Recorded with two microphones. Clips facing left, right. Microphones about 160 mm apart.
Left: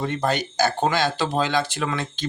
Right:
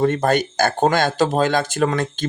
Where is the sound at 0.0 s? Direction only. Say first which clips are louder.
Right 6 dB; 50° right (ahead or behind).